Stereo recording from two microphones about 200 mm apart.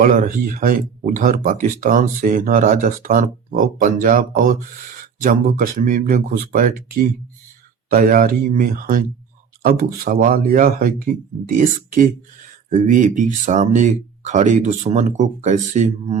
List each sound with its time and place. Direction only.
0.0 s speech: 40° right (ahead or behind)